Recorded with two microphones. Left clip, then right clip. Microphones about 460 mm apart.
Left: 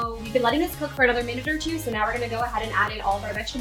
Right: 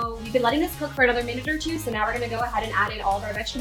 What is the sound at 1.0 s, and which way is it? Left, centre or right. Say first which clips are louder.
Speech: even; right.